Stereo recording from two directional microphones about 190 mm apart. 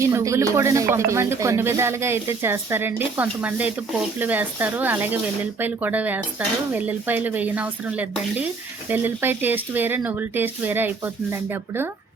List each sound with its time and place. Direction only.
0.0 s speech: 15° right (ahead or behind)